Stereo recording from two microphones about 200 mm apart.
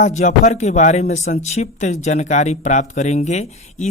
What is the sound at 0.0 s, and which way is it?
Speech, 35° left (ahead or behind).